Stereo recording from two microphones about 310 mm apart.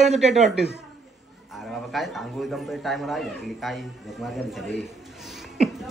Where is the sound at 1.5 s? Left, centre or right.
Centre.